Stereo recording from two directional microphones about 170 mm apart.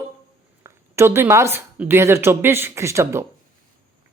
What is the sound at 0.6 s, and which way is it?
A woman's voice, 15° right (ahead or behind).